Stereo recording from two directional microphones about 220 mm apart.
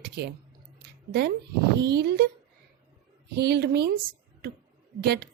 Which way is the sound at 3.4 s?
50° right (ahead or behind).